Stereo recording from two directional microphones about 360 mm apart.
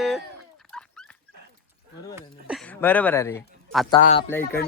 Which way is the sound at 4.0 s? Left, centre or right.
Centre.